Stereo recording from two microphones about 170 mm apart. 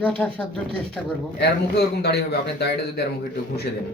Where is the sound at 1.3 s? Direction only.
75° left (ahead or behind).